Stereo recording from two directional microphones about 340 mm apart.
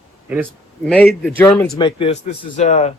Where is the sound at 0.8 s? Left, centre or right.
Centre.